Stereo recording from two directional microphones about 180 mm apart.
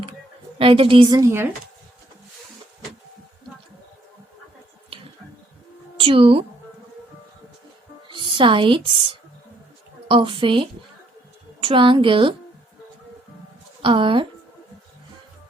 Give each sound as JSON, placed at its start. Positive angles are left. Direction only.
{"t": 0.6, "sound": "a woman's voice", "side_deg": -30}
{"t": 6.0, "sound": "a woman's voice", "side_deg": -30}
{"t": 8.0, "sound": "music", "side_deg": -25}
{"t": 10.1, "sound": "a woman's voice", "side_deg": -30}
{"t": 13.8, "sound": "a woman's voice", "side_deg": -25}